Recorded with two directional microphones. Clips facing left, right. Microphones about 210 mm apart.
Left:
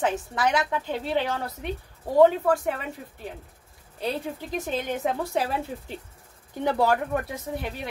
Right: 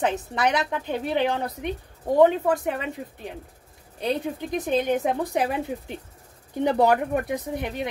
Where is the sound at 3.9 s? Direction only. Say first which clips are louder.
Right 3 dB; 20° right (ahead or behind).